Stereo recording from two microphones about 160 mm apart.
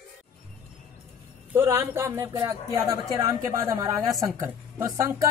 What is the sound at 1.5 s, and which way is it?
A woman's voice, 15° right (ahead or behind).